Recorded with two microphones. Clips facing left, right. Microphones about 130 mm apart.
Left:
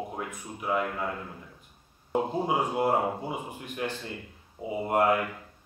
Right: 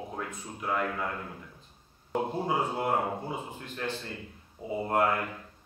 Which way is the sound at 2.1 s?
15° left (ahead or behind).